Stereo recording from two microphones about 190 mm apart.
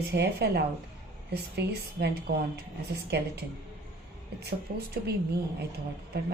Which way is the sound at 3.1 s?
60° right (ahead or behind).